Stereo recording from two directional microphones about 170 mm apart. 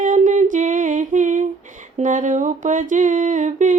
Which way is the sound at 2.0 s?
45° right (ahead or behind).